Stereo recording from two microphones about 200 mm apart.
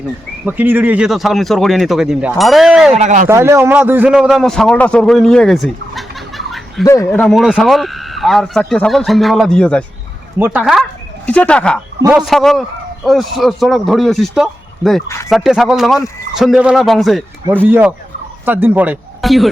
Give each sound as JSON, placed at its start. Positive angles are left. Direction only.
{"t": 0.4, "sound": "speech", "side_deg": -10}
{"t": 2.9, "sound": "speech", "side_deg": -35}
{"t": 3.2, "sound": "a man's voice", "side_deg": -15}
{"t": 6.8, "sound": "speech", "side_deg": 15}
{"t": 7.2, "sound": "speech", "side_deg": 0}
{"t": 10.3, "sound": "speech", "side_deg": -10}
{"t": 11.3, "sound": "speech", "side_deg": 5}
{"t": 15.0, "sound": "speech", "side_deg": 15}
{"t": 15.3, "sound": "speech", "side_deg": 0}